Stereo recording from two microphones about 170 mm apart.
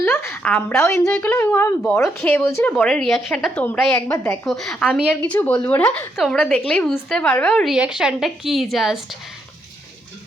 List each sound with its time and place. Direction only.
0.0 s a woman's voice: 15° left (ahead or behind)
2.7 s a woman's voice: 5° left (ahead or behind)
3.9 s a woman's voice: 20° left (ahead or behind)
4.4 s a woman's voice: centre (ahead or behind)